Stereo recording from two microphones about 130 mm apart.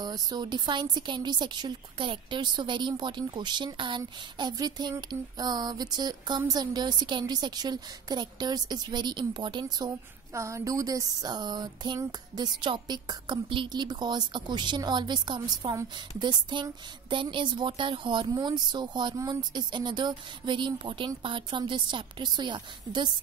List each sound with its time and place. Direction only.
0.0 s a woman's voice: 35° right (ahead or behind)